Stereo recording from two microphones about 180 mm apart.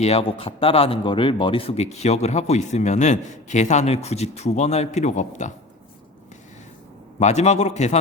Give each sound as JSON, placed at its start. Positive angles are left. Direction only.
{"t": 0.0, "sound": "speech", "side_deg": 30}
{"t": 7.2, "sound": "speech", "side_deg": 40}